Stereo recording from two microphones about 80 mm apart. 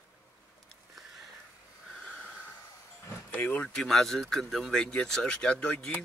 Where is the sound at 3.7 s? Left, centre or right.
Centre.